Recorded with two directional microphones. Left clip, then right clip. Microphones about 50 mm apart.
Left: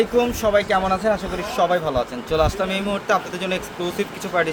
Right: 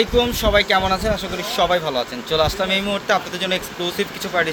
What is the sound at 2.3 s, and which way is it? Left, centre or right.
Speech, centre.